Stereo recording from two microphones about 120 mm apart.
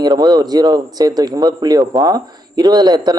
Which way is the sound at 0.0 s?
35° right (ahead or behind).